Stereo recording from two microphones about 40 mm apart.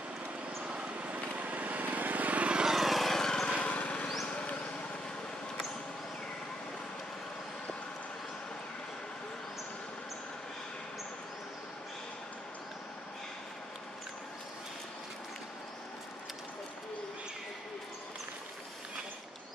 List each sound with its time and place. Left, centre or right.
0.7 s vehicle: right
1.1 s vehicle: right
2.5 s lawn mower: centre
3.6 s lawn mower: left